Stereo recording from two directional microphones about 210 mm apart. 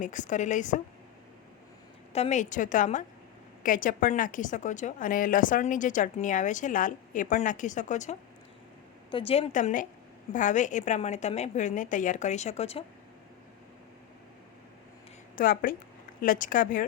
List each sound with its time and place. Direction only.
0.0 s a woman's voice: 35° left (ahead or behind)
2.1 s a woman's voice: 30° left (ahead or behind)
9.0 s a woman's voice: 25° left (ahead or behind)
15.4 s a woman's voice: 40° left (ahead or behind)